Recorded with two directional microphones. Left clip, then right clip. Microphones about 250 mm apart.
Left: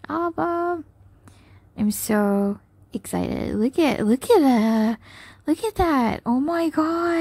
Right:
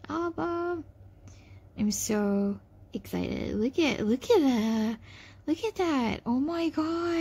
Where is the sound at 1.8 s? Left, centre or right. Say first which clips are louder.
Left 7 dB; left.